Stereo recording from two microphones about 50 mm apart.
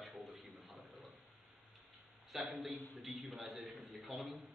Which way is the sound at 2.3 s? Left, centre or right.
Centre.